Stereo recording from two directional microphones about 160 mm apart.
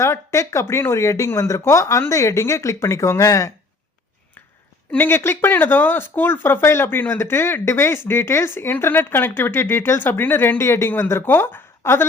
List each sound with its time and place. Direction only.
0.0 s speech: 15° left (ahead or behind)
4.9 s speech: 15° left (ahead or behind)